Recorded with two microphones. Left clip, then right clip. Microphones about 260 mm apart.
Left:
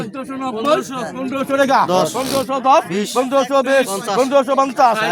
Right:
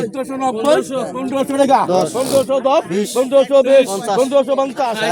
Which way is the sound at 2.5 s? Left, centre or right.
Left.